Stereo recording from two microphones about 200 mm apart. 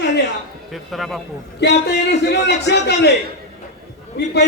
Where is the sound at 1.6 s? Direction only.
60° left (ahead or behind).